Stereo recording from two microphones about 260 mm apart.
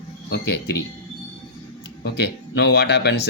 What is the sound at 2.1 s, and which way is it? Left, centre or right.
Speech, left.